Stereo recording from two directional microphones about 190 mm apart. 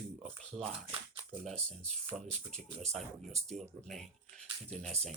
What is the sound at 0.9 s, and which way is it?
Shuffling cards, 25° right (ahead or behind).